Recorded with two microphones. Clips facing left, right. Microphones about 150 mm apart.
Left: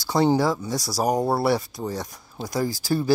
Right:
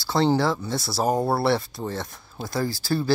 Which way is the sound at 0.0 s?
15° left (ahead or behind).